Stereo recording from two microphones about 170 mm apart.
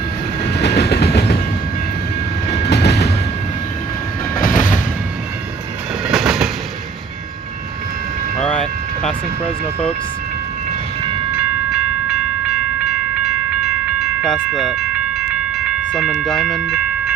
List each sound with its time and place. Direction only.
0.6 s train: 75° left (ahead or behind)
2.7 s train: 75° left (ahead or behind)
4.4 s train: 50° left (ahead or behind)
6.0 s train: 5° right (ahead or behind)
8.4 s vehicle: 5° left (ahead or behind)
11.3 s train: centre (ahead or behind)
15.9 s speech: centre (ahead or behind)